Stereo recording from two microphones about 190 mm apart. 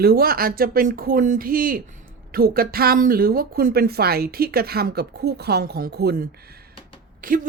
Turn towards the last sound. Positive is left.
turn(degrees=-45)  # may be behind; listen again after turning